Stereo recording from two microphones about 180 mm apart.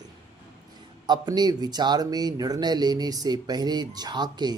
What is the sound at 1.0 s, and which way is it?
Speech, 25° right (ahead or behind).